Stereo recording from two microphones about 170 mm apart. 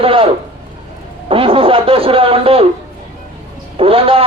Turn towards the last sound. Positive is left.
turn(degrees=-35)  # may be behind; listen again after turning